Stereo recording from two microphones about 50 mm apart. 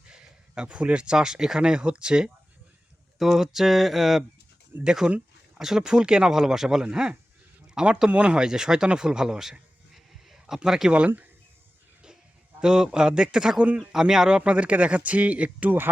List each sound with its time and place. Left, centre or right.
0.1 s speech: centre
3.2 s speech: centre
4.8 s speech: centre
12.5 s speech: centre
14.4 s speech: right